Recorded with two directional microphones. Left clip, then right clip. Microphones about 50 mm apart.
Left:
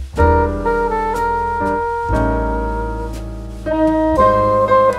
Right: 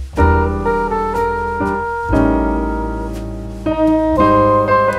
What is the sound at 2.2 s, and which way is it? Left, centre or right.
Music, centre.